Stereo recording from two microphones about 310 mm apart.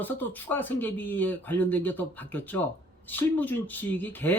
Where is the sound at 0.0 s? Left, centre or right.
Centre.